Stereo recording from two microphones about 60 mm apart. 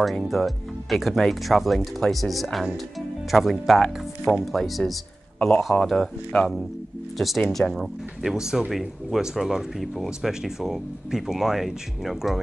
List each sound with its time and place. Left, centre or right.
0.2 s speech: centre
6.3 s speech: centre
7.2 s speech: centre